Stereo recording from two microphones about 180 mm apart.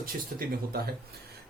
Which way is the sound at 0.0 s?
55° right (ahead or behind).